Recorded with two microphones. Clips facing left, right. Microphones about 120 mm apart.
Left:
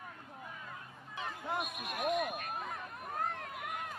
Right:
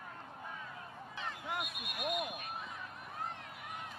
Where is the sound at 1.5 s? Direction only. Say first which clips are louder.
Left 6 dB; 25° left (ahead or behind).